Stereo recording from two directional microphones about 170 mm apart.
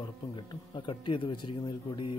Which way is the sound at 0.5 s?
30° left (ahead or behind).